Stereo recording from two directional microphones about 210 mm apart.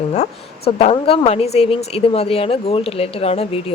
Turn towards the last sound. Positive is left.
turn(degrees=30)  # may be behind; listen again after turning